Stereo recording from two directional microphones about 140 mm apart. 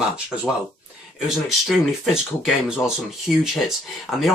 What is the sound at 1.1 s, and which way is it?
Speech, 5° right (ahead or behind).